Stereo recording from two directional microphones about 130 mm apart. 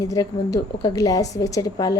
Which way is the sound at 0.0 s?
25° left (ahead or behind).